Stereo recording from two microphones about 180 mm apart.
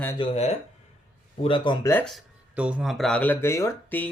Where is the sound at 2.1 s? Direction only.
5° right (ahead or behind); by 4.1 s 15° left (ahead or behind).